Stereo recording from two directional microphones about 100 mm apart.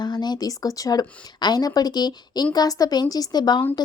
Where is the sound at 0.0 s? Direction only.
45° left (ahead or behind).